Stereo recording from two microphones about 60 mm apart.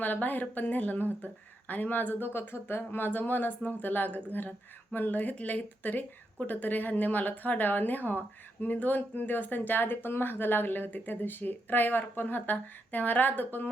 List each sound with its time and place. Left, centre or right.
0.0 s speech: left